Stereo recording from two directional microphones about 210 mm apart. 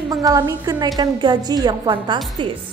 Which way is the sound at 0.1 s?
15° right (ahead or behind).